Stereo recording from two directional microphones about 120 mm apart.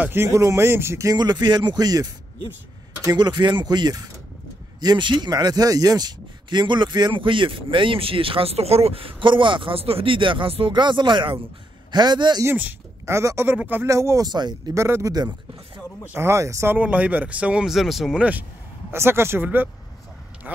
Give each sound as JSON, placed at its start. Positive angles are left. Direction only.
{"t": 0.0, "sound": "speech", "side_deg": -20}
{"t": 12.4, "sound": "a woman's voice", "side_deg": -15}
{"t": 14.8, "sound": "speech", "side_deg": -25}
{"t": 16.7, "sound": "speech", "side_deg": -15}
{"t": 18.9, "sound": "speech", "side_deg": -20}